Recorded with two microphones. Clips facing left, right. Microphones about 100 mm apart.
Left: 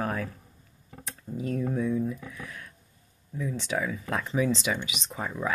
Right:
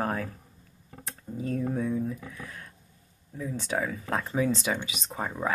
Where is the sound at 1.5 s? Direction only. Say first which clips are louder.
Even; 40° right (ahead or behind).